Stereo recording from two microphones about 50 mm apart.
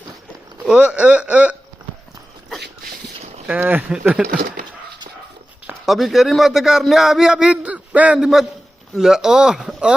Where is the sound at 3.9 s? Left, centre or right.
Centre.